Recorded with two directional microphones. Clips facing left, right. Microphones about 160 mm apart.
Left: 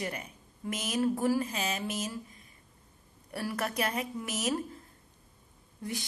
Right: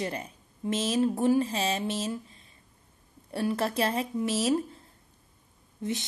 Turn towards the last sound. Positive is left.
turn(degrees=-20)  # may be behind; listen again after turning